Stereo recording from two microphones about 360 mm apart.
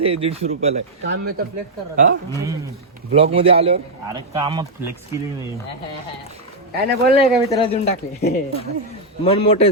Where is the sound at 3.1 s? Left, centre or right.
Centre.